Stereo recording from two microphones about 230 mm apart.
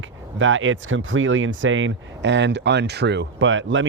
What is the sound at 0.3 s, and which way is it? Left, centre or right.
Speech, right.